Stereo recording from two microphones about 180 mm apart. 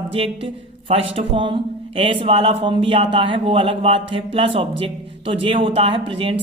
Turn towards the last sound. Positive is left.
turn(degrees=-30)  # may be behind; listen again after turning